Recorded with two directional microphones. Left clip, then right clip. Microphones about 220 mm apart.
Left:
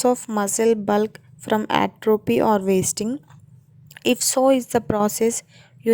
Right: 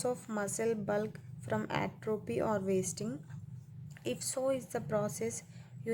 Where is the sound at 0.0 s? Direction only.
40° left (ahead or behind).